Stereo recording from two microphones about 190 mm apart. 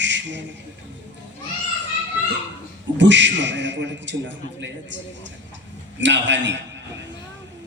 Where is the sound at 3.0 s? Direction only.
70° right (ahead or behind).